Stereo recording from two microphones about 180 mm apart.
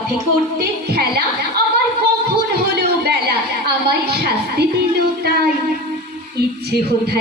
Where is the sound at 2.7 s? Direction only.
60° right (ahead or behind).